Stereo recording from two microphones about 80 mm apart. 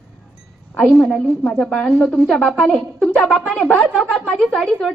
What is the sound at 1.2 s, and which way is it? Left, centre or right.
A woman's voice, centre.